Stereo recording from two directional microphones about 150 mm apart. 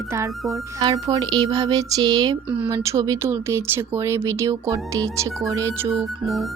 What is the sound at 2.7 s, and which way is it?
Speech, 20° right (ahead or behind).